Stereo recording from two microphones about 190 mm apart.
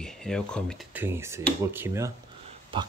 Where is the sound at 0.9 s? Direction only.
10° right (ahead or behind).